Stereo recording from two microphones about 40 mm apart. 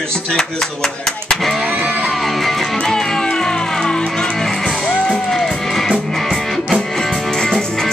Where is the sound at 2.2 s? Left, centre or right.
Centre.